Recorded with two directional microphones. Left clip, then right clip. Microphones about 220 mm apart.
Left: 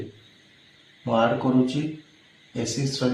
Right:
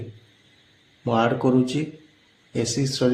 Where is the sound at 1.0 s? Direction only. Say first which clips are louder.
Right 1 dB; 50° right (ahead or behind).